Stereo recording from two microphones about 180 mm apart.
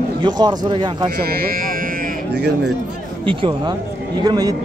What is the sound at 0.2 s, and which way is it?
Speech, 25° right (ahead or behind).